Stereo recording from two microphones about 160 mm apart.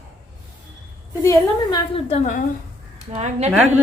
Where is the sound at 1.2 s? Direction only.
20° left (ahead or behind).